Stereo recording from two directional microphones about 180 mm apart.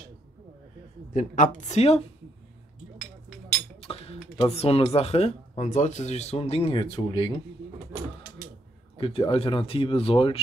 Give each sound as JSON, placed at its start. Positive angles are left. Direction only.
{"t": 1.1, "sound": "a woman's voice", "side_deg": 45}
{"t": 3.8, "sound": "speech", "side_deg": 30}
{"t": 8.9, "sound": "speech", "side_deg": 30}